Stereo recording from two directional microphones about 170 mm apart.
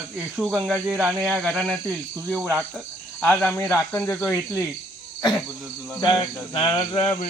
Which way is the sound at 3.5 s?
15° left (ahead or behind).